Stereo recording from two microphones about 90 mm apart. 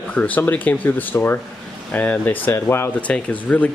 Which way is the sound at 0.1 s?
15° left (ahead or behind).